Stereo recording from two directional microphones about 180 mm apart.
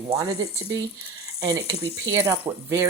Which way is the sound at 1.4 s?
20° right (ahead or behind).